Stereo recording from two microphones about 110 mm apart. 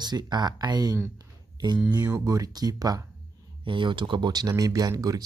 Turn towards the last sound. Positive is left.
turn(degrees=-35)  # may be behind; listen again after turning